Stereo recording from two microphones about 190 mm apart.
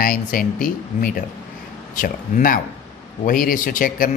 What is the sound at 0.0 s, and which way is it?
A man's voice, 50° left (ahead or behind).